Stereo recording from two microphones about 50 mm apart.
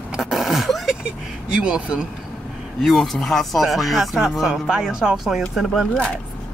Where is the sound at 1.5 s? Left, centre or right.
Centre.